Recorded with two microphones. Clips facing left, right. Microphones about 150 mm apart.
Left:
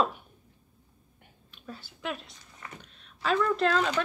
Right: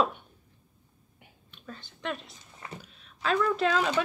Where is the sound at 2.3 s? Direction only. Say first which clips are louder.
Right 3 dB; 25° right (ahead or behind).